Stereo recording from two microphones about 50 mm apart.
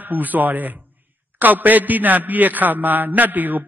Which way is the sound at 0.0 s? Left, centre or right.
Right.